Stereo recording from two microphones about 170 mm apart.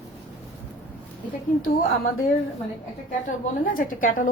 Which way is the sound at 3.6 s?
55° left (ahead or behind).